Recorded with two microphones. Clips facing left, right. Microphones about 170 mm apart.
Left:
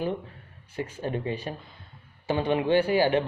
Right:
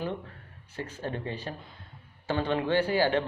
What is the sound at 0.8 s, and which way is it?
Speech, 15° left (ahead or behind).